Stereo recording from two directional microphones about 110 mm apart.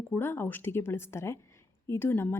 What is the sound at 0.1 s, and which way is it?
Speech, 20° left (ahead or behind).